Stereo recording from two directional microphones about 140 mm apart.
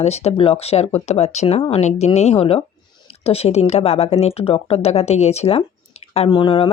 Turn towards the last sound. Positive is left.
turn(degrees=35)  # may be behind; listen again after turning